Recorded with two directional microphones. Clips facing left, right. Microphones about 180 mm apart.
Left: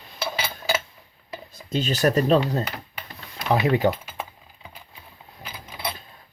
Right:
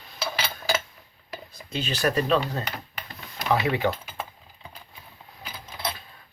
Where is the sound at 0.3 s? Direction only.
15° left (ahead or behind).